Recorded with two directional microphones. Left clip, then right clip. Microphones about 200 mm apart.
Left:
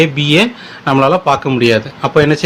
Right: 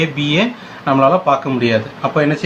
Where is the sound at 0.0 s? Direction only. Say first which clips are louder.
Left 5 dB; 45° left (ahead or behind).